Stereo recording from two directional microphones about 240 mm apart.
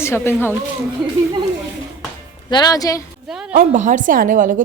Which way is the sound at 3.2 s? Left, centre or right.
Centre.